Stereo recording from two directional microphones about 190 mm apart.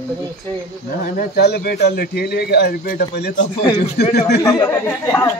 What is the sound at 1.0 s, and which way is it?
A man's voice, 55° left (ahead or behind).